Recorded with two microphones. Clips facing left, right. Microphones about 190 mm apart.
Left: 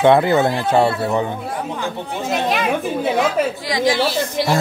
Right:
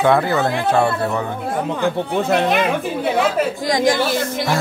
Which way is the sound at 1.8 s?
60° right (ahead or behind).